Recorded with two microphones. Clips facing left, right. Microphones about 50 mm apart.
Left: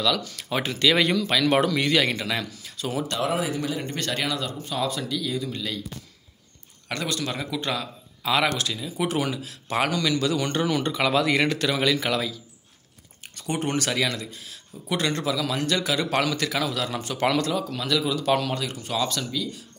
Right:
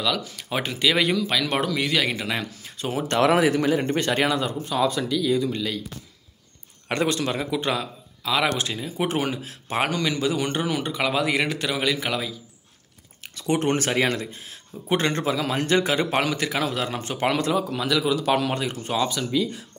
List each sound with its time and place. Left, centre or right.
0.0 s a man's voice: centre
2.1 s speech: right
3.2 s a man's voice: right
3.6 s a man's voice: right
3.9 s speech: right
4.6 s speech: centre
6.9 s speech: right
8.2 s speech: centre
8.5 s speech: right; by 12.4 s centre
13.4 s speech: right
13.7 s a man's voice: right; by 18.5 s centre
18.5 s speech: right